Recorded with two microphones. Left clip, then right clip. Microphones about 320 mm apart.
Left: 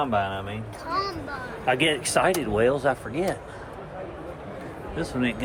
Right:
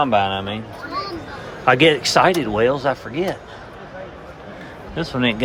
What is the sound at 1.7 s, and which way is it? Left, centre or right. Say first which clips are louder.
Speech: right 9 dB; centre.